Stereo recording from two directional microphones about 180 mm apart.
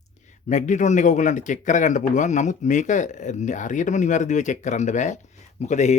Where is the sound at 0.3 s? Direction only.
40° left (ahead or behind).